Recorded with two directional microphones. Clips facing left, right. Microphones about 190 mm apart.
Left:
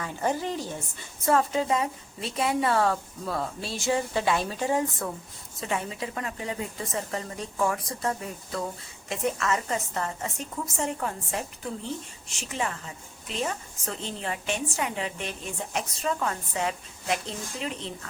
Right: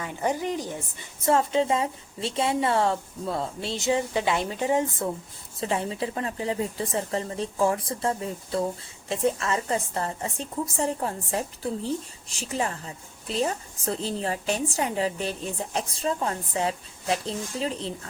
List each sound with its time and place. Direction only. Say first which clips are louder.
0.0 s a woman's voice: right 1 dB; 15° right (ahead or behind); by 17.9 s 35° right (ahead or behind)